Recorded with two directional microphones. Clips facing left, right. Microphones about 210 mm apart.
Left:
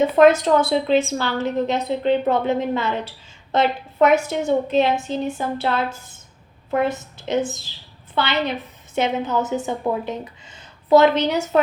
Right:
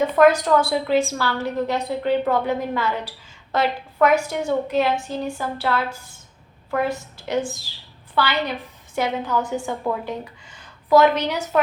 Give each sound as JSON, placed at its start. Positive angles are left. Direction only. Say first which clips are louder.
{"t": 0.0, "sound": "a woman's voice", "louder": "left 2 dB", "side_deg": 25}